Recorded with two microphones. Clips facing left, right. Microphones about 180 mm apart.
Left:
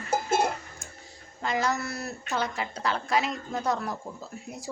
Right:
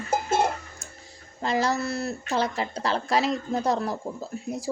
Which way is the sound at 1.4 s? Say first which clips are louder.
Right 3 dB; 35° right (ahead or behind).